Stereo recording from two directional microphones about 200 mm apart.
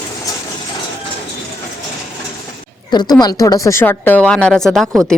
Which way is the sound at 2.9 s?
20° left (ahead or behind).